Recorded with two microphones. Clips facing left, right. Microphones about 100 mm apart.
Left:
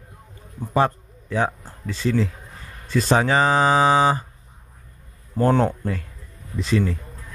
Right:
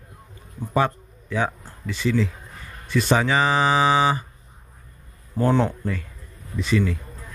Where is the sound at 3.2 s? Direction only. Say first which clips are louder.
Left 2 dB; 40° left (ahead or behind).